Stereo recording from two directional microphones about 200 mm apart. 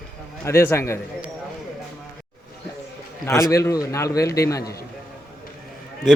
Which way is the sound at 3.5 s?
15° left (ahead or behind).